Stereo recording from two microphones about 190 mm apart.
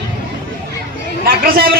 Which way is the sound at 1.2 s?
50° right (ahead or behind).